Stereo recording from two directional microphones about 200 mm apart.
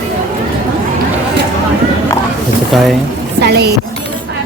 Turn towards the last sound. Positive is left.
turn(degrees=-55)  # may be behind; listen again after turning